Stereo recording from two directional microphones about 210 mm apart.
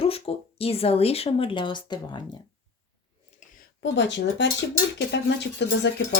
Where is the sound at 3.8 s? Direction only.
55° left (ahead or behind).